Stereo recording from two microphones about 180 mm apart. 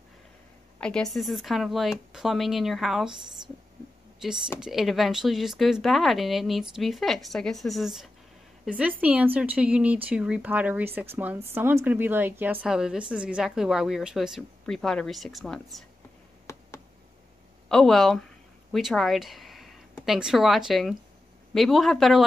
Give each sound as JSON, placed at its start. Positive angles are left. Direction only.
{"t": 0.7, "sound": "speech", "side_deg": 5}
{"t": 4.2, "sound": "speech", "side_deg": -5}
{"t": 16.5, "sound": "a sound", "side_deg": 15}
{"t": 17.6, "sound": "speech", "side_deg": 0}